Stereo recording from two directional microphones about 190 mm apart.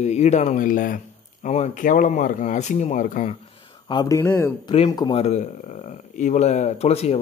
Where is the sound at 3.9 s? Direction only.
20° left (ahead or behind).